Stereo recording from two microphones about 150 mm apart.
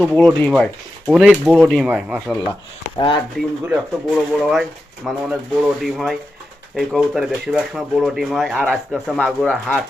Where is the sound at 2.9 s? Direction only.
30° left (ahead or behind).